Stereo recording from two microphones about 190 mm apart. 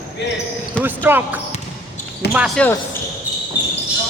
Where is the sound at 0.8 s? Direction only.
10° right (ahead or behind).